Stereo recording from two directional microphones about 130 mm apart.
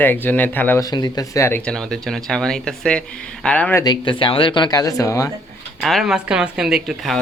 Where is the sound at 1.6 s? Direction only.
5° left (ahead or behind).